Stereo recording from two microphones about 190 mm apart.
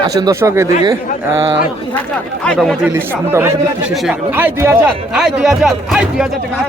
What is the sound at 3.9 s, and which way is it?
Speech, centre (ahead or behind).